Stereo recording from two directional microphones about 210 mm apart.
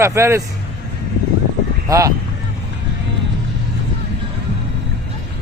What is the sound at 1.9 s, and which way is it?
Speech, 15° right (ahead or behind).